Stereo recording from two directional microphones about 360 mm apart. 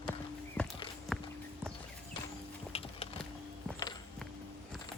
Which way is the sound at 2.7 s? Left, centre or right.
Centre.